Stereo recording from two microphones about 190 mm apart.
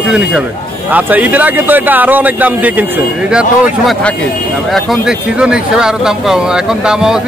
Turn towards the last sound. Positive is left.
turn(degrees=-5)  # may be behind; listen again after turning